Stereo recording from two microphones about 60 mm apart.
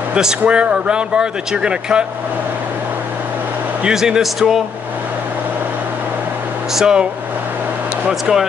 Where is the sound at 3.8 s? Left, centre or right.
Centre.